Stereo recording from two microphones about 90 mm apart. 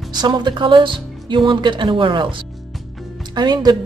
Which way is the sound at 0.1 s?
55° right (ahead or behind).